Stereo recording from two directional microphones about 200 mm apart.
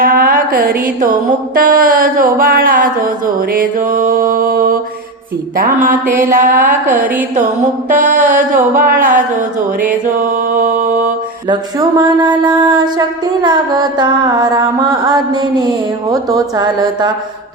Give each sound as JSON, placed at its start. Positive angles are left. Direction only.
{"t": 0.0, "sound": "music", "side_deg": -45}
{"t": 6.7, "sound": "a sound", "side_deg": -10}
{"t": 7.9, "sound": "mantra", "side_deg": -40}
{"t": 8.5, "sound": "music", "side_deg": -45}
{"t": 10.2, "sound": "mantra", "side_deg": -40}
{"t": 11.4, "sound": "a sound", "side_deg": -20}